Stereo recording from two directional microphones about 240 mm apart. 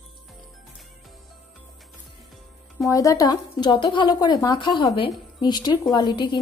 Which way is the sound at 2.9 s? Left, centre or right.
Centre.